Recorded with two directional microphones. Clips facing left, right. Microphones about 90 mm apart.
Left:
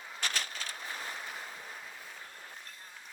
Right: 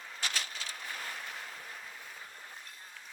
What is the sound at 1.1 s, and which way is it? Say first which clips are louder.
Ocean: left 1 dB; 5° left (ahead or behind).